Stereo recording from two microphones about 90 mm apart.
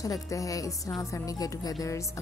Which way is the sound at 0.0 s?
40° left (ahead or behind).